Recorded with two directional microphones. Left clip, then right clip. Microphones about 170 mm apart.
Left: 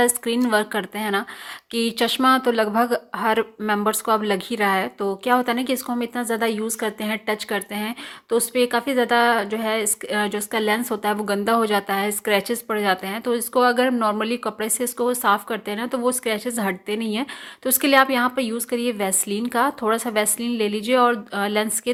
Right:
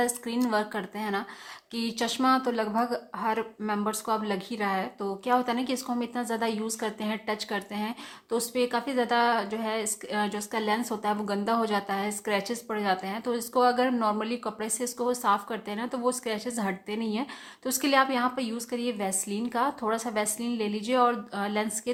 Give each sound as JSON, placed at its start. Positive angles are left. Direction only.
{"t": 0.3, "sound": "a woman's voice", "side_deg": 20}